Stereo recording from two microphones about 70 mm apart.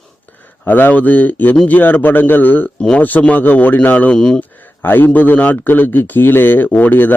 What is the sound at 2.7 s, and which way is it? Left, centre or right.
Speech, centre.